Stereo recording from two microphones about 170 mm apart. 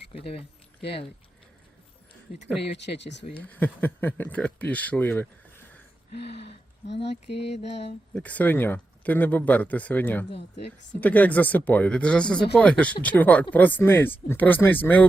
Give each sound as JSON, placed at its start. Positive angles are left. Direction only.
{"t": 0.8, "sound": "speech", "side_deg": 80}
{"t": 2.7, "sound": "speech", "side_deg": 90}
{"t": 3.3, "sound": "speech", "side_deg": 10}
{"t": 6.1, "sound": "speech", "side_deg": 80}
{"t": 8.1, "sound": "speech", "side_deg": 10}